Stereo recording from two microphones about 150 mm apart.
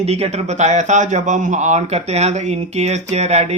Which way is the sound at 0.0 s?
45° right (ahead or behind).